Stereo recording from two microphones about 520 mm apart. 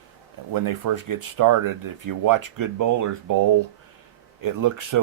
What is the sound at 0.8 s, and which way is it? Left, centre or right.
Speech, right.